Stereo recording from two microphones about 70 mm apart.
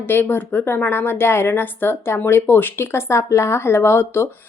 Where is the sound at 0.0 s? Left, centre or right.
Left.